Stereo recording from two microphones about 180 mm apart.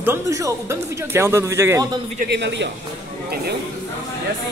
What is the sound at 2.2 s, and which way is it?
Speech, 75° right (ahead or behind).